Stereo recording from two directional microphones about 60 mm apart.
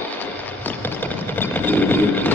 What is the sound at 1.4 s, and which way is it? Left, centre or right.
Vehicle, left.